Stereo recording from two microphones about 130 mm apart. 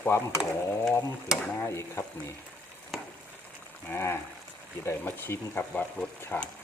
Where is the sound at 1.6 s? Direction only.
20° left (ahead or behind).